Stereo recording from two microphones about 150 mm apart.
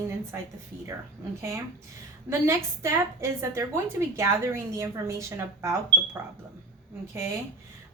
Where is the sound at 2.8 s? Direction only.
20° right (ahead or behind).